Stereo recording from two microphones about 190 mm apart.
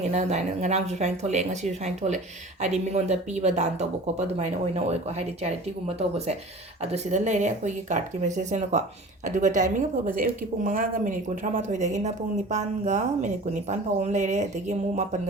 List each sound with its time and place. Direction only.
0.0 s speech: 35° right (ahead or behind)
6.0 s speech: 35° right (ahead or behind)